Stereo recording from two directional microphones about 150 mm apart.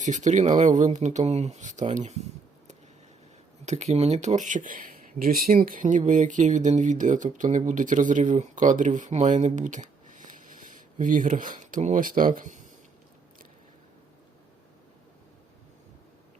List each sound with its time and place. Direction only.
0.0 s speech: 55° right (ahead or behind)
3.7 s speech: 50° right (ahead or behind)